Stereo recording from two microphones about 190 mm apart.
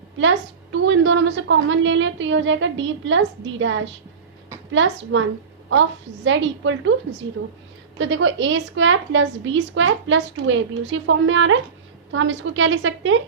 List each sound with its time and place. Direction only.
0.2 s a woman's voice: 80° right
6.2 s a woman's voice: 80° right